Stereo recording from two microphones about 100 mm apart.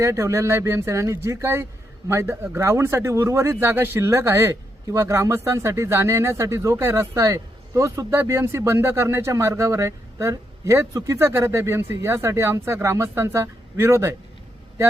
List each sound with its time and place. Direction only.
0.0 s speech: 30° right (ahead or behind)